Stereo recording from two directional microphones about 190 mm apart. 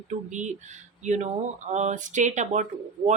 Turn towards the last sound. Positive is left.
turn(degrees=-40)  # may be behind; listen again after turning